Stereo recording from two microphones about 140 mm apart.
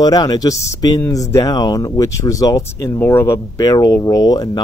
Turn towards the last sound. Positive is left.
turn(degrees=30)  # may be behind; listen again after turning